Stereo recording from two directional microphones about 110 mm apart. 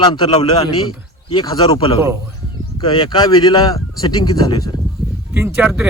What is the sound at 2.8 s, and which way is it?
Speech, 50° left (ahead or behind).